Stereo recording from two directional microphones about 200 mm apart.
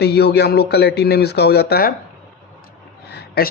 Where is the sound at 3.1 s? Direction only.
50° left (ahead or behind).